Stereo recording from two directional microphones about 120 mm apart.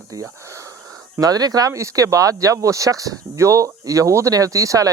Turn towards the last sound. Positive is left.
turn(degrees=-30)  # may be behind; listen again after turning